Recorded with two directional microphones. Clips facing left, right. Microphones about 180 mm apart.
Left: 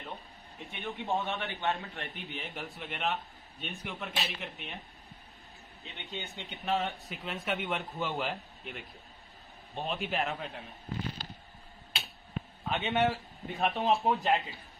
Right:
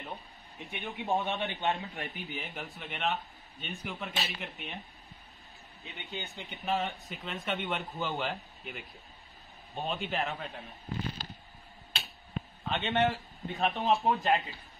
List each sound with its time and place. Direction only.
0.6 s a man's voice: 20° right (ahead or behind)
2.0 s speech: centre (ahead or behind)
5.9 s speech: centre (ahead or behind)
12.6 s a man's voice: centre (ahead or behind)